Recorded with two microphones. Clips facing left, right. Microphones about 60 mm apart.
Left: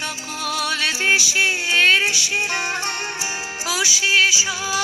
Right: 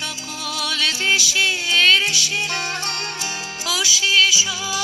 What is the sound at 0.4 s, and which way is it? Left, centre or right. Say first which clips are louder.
Music: left 2 dB; left.